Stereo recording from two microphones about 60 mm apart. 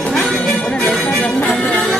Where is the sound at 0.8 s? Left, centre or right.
Centre.